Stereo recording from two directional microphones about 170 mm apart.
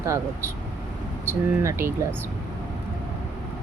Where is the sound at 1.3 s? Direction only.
15° right (ahead or behind).